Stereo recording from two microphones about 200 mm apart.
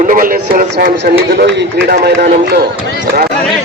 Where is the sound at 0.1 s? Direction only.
45° right (ahead or behind).